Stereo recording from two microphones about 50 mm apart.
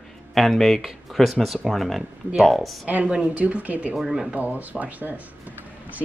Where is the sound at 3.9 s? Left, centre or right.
Centre.